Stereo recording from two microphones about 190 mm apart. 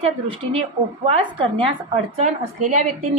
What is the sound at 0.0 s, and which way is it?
A woman's voice, 30° right (ahead or behind).